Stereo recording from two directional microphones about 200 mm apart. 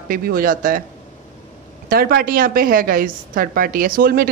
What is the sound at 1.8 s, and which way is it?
A woman's voice, 50° right (ahead or behind).